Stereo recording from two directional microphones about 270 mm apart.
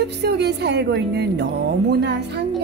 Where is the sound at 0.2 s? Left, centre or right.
Right.